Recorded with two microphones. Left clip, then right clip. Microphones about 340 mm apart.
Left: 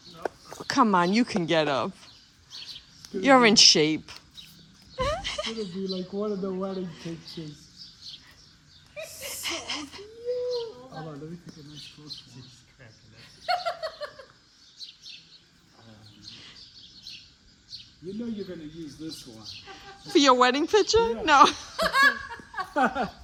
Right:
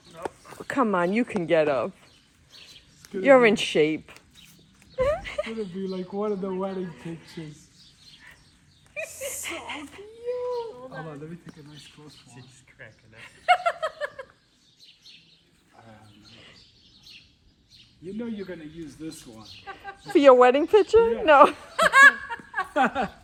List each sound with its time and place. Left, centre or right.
0.7 s speech: centre
3.2 s speech: centre
4.9 s a sound: centre
5.8 s speech: right
9.0 s a sound: centre
12.8 s chuckle: centre
19.6 s speech: centre
22.7 s speech: right